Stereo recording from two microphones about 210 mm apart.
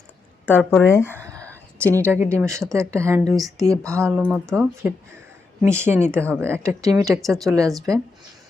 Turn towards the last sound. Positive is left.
turn(degrees=-15)  # may be behind; listen again after turning